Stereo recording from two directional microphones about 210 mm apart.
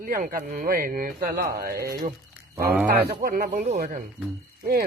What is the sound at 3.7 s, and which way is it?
Speech, 40° right (ahead or behind).